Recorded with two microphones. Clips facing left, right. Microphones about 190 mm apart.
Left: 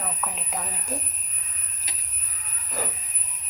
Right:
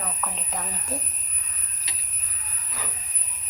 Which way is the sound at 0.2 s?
5° left (ahead or behind).